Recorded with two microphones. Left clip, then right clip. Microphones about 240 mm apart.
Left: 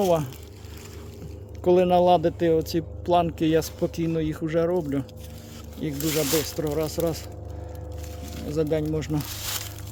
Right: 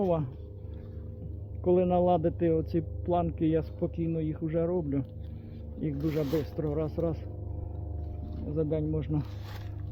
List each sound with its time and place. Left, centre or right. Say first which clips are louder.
0.0 s speech: left 7 dB; left
1.6 s speech: left 7 dB; left
8.5 s speech: left 6 dB; left